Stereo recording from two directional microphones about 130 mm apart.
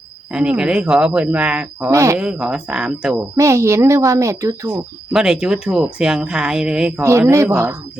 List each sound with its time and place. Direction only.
0.3 s speech: 10° right (ahead or behind)
1.9 s a woman's voice: 25° right (ahead or behind)
2.1 s speech: 5° right (ahead or behind)
3.3 s a woman's voice: 20° right (ahead or behind)
5.1 s speech: 5° right (ahead or behind)
7.0 s a woman's voice: 20° right (ahead or behind)